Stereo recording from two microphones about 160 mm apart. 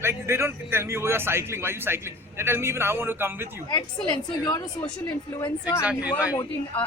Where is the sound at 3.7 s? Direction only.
25° left (ahead or behind).